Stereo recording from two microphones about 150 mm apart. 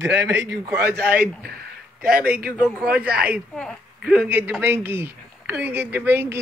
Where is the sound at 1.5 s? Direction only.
90° right.